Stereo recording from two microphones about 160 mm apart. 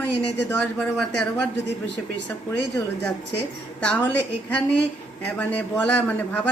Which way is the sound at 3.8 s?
10° left (ahead or behind).